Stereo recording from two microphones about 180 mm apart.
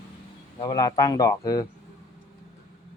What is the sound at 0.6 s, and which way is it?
Speech, 20° left (ahead or behind).